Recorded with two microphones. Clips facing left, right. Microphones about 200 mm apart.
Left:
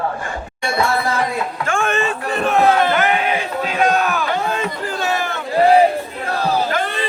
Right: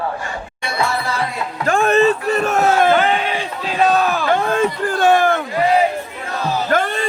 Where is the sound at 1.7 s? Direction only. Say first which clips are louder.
Right 8 dB; 35° right (ahead or behind).